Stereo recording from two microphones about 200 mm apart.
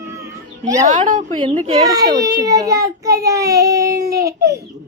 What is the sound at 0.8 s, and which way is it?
Speech, 40° right (ahead or behind).